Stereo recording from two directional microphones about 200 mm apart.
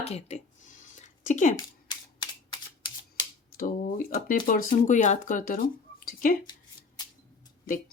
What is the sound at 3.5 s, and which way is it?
Speech, 45° left (ahead or behind).